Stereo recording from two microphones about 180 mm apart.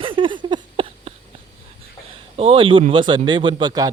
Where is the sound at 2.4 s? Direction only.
30° right (ahead or behind).